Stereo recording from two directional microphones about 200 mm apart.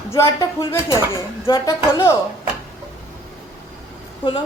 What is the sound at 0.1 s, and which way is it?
Speech, 15° left (ahead or behind).